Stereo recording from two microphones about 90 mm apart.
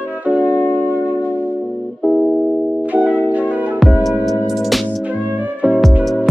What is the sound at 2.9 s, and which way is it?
Music, 15° right (ahead or behind).